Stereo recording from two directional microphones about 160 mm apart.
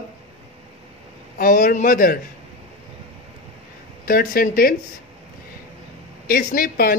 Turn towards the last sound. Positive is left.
turn(degrees=65)  # may be behind; listen again after turning